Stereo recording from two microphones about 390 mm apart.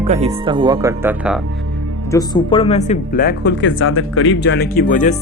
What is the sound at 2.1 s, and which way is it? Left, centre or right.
Speech, centre.